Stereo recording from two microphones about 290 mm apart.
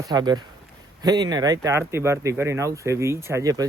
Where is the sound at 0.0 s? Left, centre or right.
Centre.